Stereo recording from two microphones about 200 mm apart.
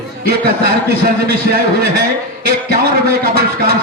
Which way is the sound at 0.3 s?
50° right (ahead or behind).